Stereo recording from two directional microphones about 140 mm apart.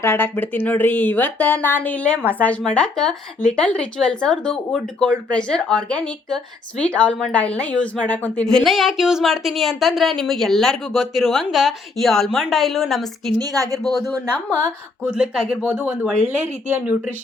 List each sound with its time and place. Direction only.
0.0 s speech: 15° left (ahead or behind); by 13.3 s centre (ahead or behind)
13.4 s a woman's voice: 25° right (ahead or behind)
15.0 s speech: 5° right (ahead or behind)